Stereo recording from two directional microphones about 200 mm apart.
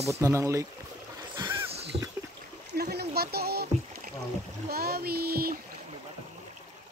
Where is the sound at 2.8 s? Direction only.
50° right (ahead or behind).